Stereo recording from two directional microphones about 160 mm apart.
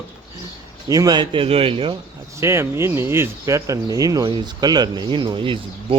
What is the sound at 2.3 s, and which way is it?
Speech, 15° right (ahead or behind).